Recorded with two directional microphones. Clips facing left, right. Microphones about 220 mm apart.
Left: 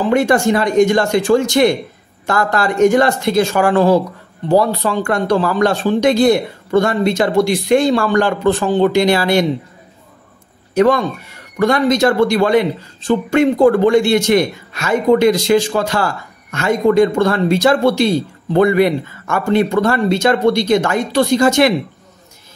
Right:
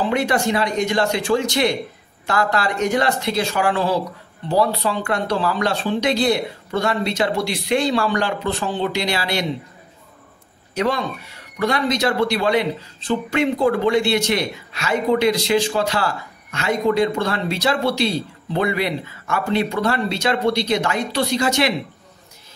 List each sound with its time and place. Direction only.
0.1 s a man's voice: 50° left (ahead or behind)
10.7 s a man's voice: 50° left (ahead or behind)